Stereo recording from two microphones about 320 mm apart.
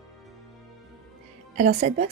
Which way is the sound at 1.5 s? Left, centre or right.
Right.